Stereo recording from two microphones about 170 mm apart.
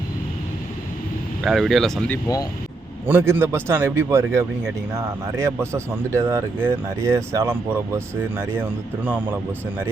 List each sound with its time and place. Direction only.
1.5 s speech: centre (ahead or behind)
2.2 s speech: 20° left (ahead or behind)
3.1 s speech: 10° right (ahead or behind)